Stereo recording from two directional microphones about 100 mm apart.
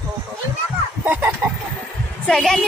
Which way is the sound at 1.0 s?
15° right (ahead or behind).